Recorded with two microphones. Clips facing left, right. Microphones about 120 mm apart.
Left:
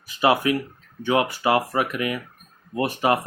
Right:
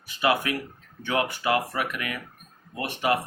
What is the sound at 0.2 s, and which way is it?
Speech, 30° left (ahead or behind).